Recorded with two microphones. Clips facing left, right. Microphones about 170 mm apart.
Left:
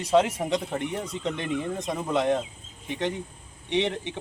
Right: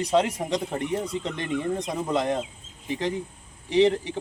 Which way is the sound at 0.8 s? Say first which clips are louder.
Right 3 dB; 35° right (ahead or behind).